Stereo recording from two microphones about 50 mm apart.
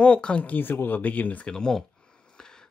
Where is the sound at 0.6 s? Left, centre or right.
Left.